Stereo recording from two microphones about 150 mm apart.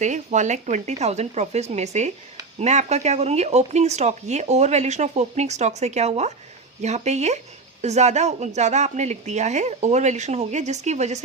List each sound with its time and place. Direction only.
0.0 s speech: 55° right (ahead or behind)